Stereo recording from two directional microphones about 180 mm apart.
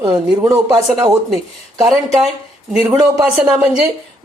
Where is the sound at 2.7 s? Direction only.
15° right (ahead or behind).